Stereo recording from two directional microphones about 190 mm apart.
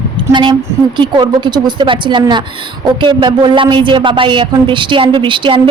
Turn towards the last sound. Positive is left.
turn(degrees=-25)  # may be behind; listen again after turning